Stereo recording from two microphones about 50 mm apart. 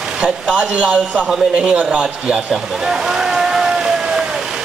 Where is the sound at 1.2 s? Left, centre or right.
Centre.